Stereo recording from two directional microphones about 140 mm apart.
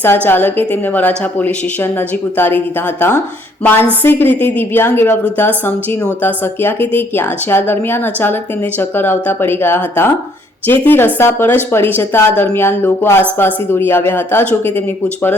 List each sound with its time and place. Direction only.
0.3 s a woman's voice: 15° left (ahead or behind)